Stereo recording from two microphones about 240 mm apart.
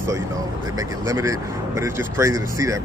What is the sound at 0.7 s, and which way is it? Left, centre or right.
Speech, centre.